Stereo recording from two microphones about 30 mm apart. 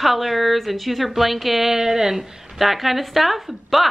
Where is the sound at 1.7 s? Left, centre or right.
Centre.